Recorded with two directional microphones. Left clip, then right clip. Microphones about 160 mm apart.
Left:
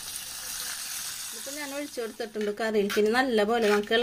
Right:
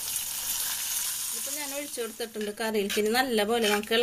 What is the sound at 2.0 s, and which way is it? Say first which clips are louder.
Speech: left 2 dB; 35° left (ahead or behind).